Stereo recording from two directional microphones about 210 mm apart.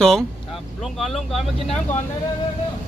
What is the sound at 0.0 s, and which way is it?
Speech, centre (ahead or behind).